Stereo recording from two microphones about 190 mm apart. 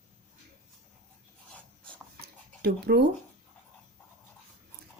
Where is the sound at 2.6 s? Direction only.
60° right (ahead or behind).